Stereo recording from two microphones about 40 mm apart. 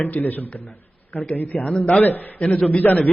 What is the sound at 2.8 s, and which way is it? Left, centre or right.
Speech, centre.